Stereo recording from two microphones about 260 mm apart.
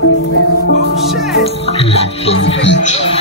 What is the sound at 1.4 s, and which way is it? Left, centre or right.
Music, left.